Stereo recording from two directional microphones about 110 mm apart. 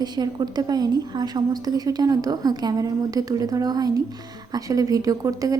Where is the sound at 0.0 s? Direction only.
40° right (ahead or behind).